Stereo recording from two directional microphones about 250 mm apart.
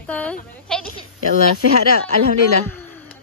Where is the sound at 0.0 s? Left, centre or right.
Centre.